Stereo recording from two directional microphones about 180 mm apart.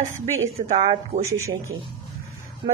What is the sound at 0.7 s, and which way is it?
Speech, 40° right (ahead or behind).